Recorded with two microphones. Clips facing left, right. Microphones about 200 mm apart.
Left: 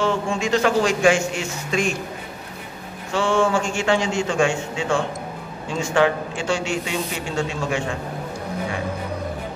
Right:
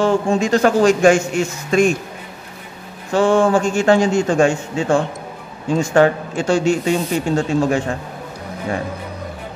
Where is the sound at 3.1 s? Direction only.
40° right (ahead or behind).